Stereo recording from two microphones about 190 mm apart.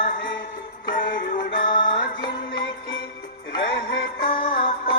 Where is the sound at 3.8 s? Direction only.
60° left (ahead or behind).